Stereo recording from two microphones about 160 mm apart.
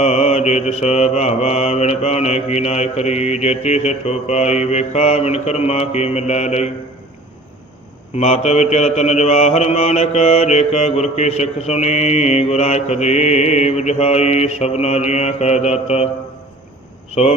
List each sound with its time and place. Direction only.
0.0 s mantra: 45° left (ahead or behind)
8.1 s mantra: 40° left (ahead or behind)
17.2 s mantra: 40° left (ahead or behind)